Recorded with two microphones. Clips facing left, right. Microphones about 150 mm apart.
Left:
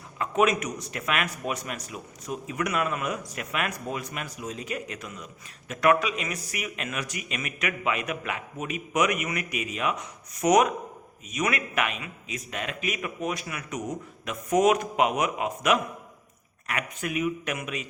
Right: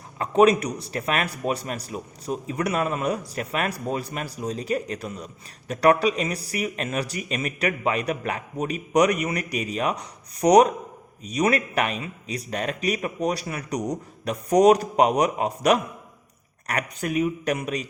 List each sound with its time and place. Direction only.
0.2 s a man's voice: 35° right (ahead or behind)